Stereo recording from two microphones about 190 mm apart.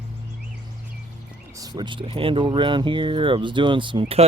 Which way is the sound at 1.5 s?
20° right (ahead or behind).